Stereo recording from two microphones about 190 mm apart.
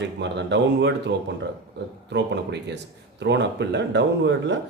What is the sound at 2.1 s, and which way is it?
Speech, 65° right (ahead or behind).